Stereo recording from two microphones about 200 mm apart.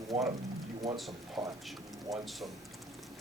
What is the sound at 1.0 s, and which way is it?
Speech, centre (ahead or behind).